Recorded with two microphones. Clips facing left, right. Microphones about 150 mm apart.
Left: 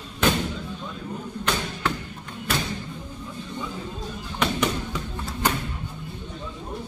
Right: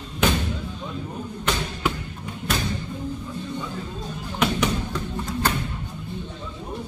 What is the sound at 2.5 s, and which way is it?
Music, centre (ahead or behind).